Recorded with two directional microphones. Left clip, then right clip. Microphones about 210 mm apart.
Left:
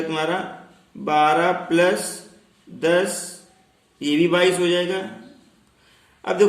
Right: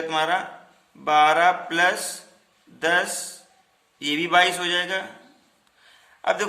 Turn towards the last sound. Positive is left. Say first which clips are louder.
# left 4 dB
turn(degrees=-50)  # may be behind; listen again after turning